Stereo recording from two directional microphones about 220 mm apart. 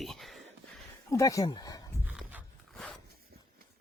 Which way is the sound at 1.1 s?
15° left (ahead or behind).